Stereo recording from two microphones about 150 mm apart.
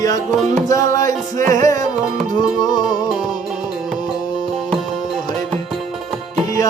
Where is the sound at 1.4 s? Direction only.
60° right (ahead or behind).